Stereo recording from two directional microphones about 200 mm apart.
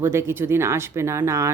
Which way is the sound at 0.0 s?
10° right (ahead or behind).